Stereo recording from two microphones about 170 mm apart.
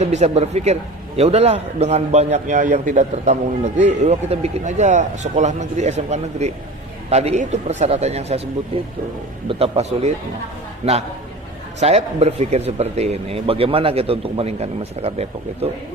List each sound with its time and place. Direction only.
0.0 s speech: 40° right (ahead or behind)
11.8 s speech: 40° right (ahead or behind)